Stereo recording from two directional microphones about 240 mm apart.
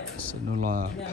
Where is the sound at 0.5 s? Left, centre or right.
Right.